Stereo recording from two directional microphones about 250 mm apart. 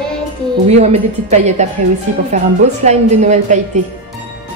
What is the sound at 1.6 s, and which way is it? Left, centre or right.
Speech, right.